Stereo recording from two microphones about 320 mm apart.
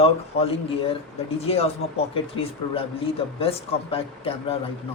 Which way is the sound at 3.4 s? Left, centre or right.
Centre.